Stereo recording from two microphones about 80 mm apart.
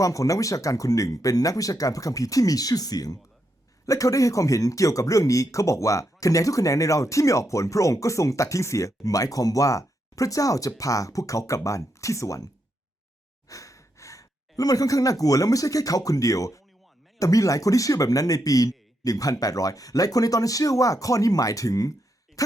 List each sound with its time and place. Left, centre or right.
0.0 s speech: left
13.5 s speech: left
22.4 s a sound: left